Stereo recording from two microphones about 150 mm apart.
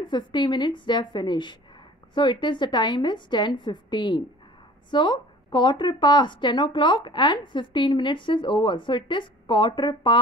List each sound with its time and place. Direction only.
0.0 s a woman's voice: 30° left (ahead or behind)